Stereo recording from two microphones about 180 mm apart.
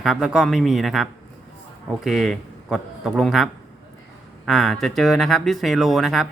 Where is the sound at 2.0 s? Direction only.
Centre (ahead or behind).